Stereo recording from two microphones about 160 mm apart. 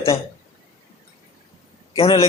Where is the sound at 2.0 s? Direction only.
35° left (ahead or behind).